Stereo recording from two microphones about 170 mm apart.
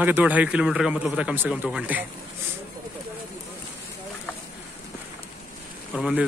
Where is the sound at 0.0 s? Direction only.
10° right (ahead or behind).